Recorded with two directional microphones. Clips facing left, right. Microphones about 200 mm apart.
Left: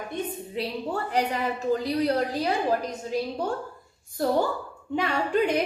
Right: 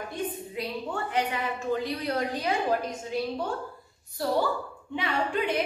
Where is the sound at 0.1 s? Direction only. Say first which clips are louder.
Left 3 dB; 35° left (ahead or behind).